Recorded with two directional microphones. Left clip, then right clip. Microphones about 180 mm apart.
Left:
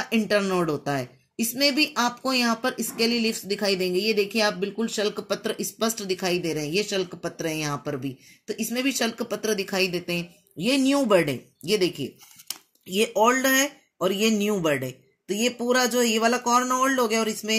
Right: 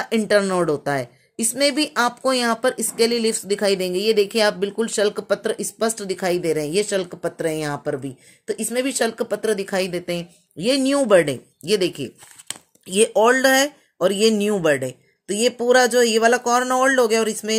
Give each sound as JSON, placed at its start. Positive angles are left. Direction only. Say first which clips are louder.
{"t": 0.1, "sound": "a woman's voice", "louder": "right 5 dB", "side_deg": -35}